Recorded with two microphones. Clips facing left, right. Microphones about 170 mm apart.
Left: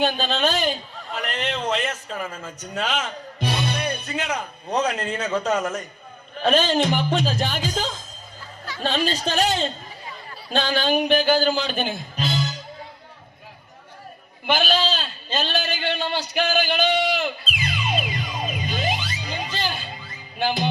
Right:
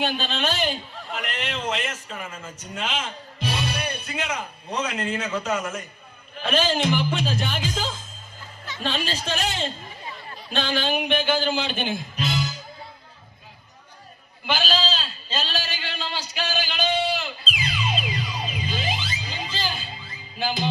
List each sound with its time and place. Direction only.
0.0 s a man's voice: 35° left (ahead or behind)
3.4 s speech: 35° left (ahead or behind)
14.4 s a sound: 55° left (ahead or behind)